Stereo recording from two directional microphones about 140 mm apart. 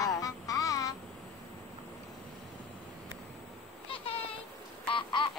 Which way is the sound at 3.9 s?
40° left (ahead or behind).